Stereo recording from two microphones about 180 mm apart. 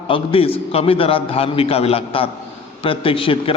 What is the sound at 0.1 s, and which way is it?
A man's voice, 30° left (ahead or behind).